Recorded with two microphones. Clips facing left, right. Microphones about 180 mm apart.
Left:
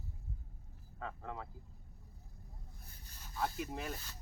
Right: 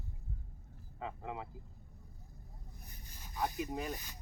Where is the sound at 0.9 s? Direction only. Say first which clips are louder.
Right 2 dB; 15° right (ahead or behind).